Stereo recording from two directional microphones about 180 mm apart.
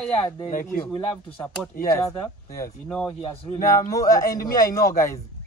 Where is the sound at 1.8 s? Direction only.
15° left (ahead or behind).